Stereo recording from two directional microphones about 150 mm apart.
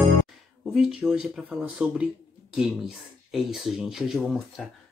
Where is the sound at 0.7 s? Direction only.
5° right (ahead or behind).